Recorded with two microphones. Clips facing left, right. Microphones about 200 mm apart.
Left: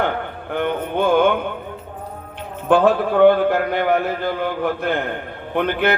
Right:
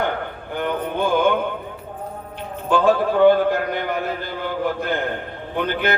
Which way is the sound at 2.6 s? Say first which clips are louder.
Left 2 dB; 55° left (ahead or behind).